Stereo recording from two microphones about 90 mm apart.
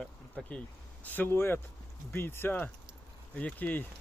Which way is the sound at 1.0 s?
20° left (ahead or behind).